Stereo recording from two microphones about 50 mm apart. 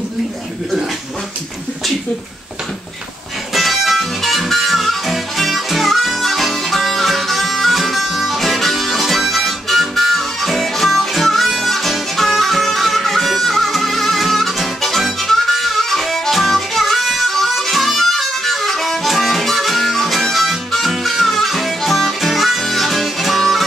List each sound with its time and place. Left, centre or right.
3.5 s music: centre